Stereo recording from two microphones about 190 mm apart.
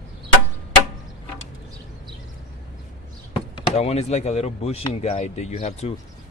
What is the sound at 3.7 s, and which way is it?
Speech, 35° left (ahead or behind).